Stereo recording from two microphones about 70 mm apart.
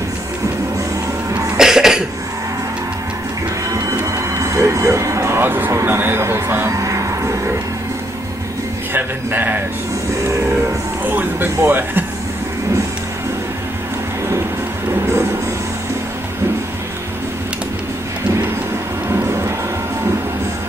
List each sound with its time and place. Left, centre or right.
1.6 s cough: centre
4.4 s music: right
5.4 s a sound: right
5.7 s a sound: right
5.9 s speech: right
6.8 s music: right
8.9 s speech: right
11.1 s speech: right
19.1 s vehicle: right